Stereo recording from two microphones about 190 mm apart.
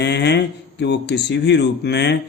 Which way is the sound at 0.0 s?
60° left (ahead or behind).